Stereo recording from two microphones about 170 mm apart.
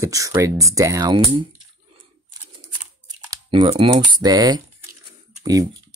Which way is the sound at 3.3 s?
25° right (ahead or behind).